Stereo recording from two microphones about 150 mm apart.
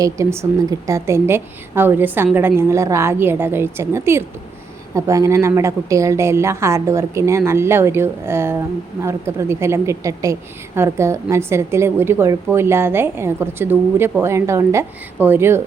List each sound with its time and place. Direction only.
0.0 s a woman's voice: 20° right (ahead or behind)